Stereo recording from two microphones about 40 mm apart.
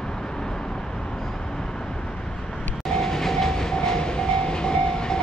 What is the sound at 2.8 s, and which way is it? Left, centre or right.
Train, centre.